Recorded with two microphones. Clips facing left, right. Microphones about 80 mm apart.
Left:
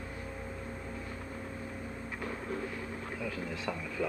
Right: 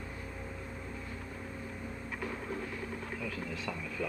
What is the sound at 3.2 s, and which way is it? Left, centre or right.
Speech, centre.